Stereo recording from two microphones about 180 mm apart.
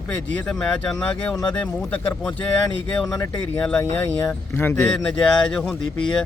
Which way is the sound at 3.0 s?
20° left (ahead or behind).